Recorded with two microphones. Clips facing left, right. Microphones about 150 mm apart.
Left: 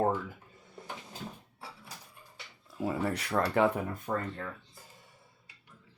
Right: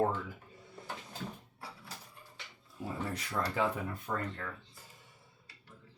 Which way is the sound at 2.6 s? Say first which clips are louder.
Left 7 dB; 80° left.